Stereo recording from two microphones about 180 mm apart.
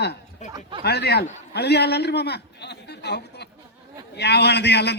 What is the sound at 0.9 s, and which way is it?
A man's voice, 65° left (ahead or behind).